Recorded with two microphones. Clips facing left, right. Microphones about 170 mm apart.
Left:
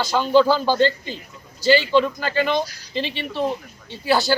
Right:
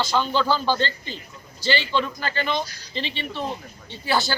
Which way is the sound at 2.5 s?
5° left (ahead or behind).